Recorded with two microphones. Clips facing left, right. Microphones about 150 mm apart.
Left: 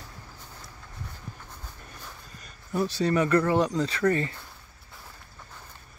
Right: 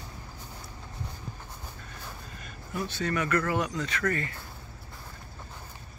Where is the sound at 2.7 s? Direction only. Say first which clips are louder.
Left 6 dB; 35° left (ahead or behind).